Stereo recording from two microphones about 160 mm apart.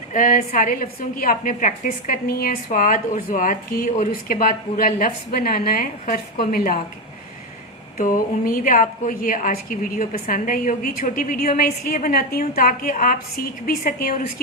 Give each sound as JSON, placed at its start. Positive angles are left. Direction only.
{"t": 0.1, "sound": "a woman's voice", "side_deg": 60}
{"t": 2.6, "sound": "a woman's voice", "side_deg": 55}
{"t": 7.9, "sound": "a woman's voice", "side_deg": 60}